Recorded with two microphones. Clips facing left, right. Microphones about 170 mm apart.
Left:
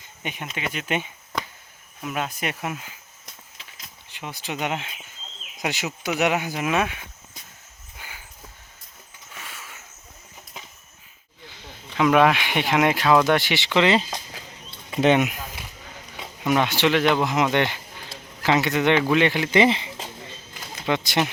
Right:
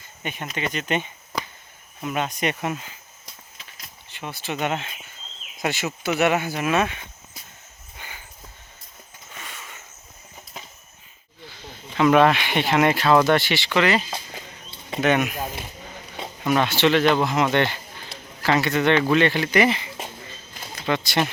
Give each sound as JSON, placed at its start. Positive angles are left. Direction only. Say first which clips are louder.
{"t": 0.2, "sound": "speech", "louder": "right 2 dB", "side_deg": 10}
{"t": 7.9, "sound": "a sound", "louder": "right 1 dB", "side_deg": 5}
{"t": 9.3, "sound": "a sound", "louder": "right 1 dB", "side_deg": 5}
{"t": 11.9, "sound": "speech", "louder": "right 1 dB", "side_deg": 10}
{"t": 15.0, "sound": "speech", "louder": "left 2 dB", "side_deg": 20}
{"t": 16.4, "sound": "speech", "louder": "right 1 dB", "side_deg": 15}